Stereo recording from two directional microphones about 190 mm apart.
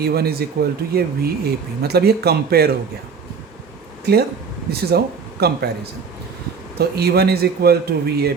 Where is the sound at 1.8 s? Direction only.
55° right (ahead or behind).